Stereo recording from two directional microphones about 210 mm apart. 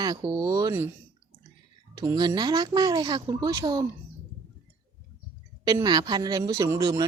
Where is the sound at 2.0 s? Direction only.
20° right (ahead or behind).